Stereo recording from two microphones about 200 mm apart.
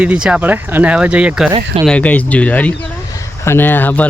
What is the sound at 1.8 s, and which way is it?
Speech, 5° left (ahead or behind).